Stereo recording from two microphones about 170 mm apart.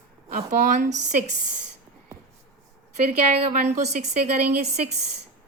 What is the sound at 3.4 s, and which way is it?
A woman's voice, 40° right (ahead or behind).